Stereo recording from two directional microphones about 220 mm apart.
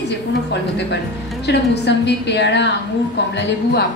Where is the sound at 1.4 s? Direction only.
50° left (ahead or behind).